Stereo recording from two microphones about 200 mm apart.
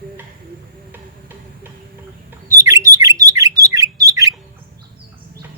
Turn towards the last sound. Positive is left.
turn(degrees=-15)  # may be behind; listen again after turning